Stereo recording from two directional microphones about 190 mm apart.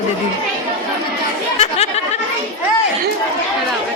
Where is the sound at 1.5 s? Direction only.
35° left (ahead or behind).